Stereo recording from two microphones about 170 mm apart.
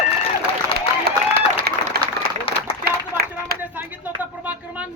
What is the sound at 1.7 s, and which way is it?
Applause, 65° right (ahead or behind).